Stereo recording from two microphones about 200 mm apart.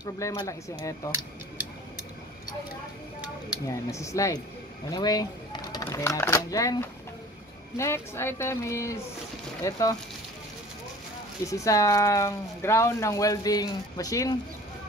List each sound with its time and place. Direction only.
0.0 s speech: 15° left (ahead or behind)
3.6 s speech: 15° left (ahead or behind)
11.4 s speech: 15° left (ahead or behind)